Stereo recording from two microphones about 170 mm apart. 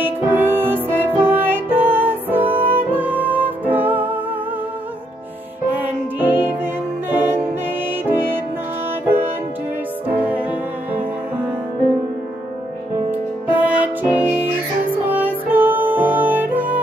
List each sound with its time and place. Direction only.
0.0 s music: 15° right (ahead or behind)
5.7 s music: 10° right (ahead or behind)
10.0 s music: 10° right (ahead or behind)
13.5 s music: 10° right (ahead or behind)